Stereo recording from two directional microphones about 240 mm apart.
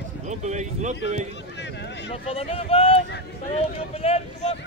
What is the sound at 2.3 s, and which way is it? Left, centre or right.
Speech, left.